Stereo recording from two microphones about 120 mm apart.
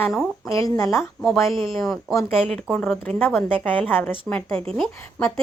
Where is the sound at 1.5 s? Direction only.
45° right (ahead or behind).